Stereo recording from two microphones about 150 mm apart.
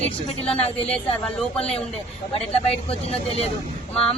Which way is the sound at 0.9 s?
5° left (ahead or behind).